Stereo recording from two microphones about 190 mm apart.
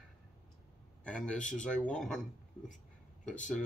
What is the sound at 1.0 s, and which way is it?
Speech, 5° left (ahead or behind).